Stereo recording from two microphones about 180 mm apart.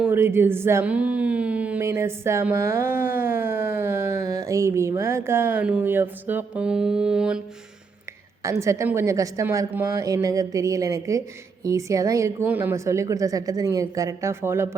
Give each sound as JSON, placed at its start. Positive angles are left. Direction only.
{"t": 0.0, "sound": "speech", "side_deg": -10}
{"t": 8.4, "sound": "speech", "side_deg": -15}